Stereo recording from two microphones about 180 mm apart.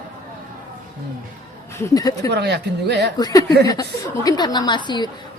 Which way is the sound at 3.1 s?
20° left (ahead or behind).